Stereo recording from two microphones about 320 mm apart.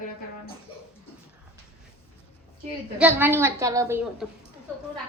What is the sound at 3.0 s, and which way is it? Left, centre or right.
A child's voice, centre.